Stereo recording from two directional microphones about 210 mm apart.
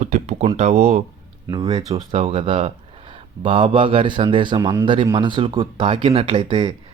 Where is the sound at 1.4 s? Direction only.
20° right (ahead or behind).